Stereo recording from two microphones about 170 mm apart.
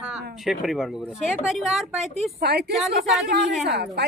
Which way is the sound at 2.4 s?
70° right (ahead or behind).